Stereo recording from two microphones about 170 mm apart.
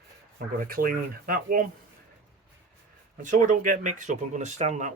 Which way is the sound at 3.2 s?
50° right (ahead or behind).